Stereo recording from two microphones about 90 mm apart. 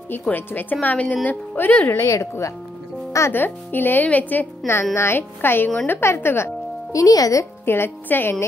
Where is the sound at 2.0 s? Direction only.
35° left (ahead or behind).